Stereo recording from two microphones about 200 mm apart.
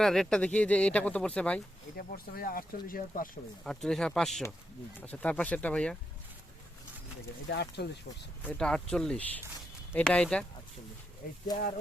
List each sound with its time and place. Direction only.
0.0 s speech: centre (ahead or behind)
2.0 s speech: 50° left (ahead or behind)
3.6 s speech: centre (ahead or behind)
7.4 s speech: 55° left (ahead or behind)
8.4 s speech: 5° left (ahead or behind)